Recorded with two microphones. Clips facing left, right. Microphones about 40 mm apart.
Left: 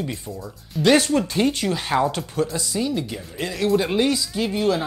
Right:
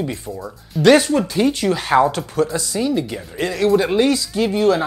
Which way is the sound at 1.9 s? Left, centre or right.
Right.